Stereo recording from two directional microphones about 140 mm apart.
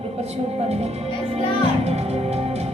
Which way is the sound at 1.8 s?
50° right (ahead or behind).